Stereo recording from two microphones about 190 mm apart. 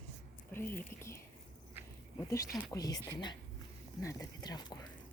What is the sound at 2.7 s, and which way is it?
Speech, 20° left (ahead or behind).